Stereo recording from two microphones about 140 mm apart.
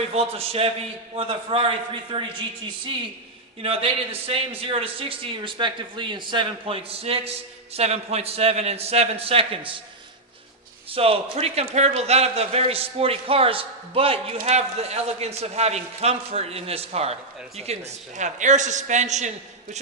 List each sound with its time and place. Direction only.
0.1 s a man's voice: 45° right (ahead or behind)
10.9 s a man's voice: 45° right (ahead or behind)